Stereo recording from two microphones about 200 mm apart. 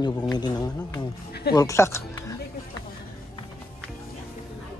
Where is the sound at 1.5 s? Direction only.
15° left (ahead or behind).